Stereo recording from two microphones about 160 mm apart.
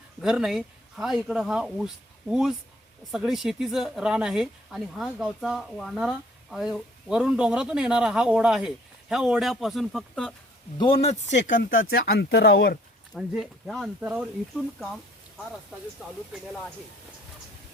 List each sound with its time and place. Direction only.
0.2 s speech: 5° right (ahead or behind)
10.8 s speech: 35° left (ahead or behind); by 12.8 s 65° left (ahead or behind)
13.1 s speech: centre (ahead or behind)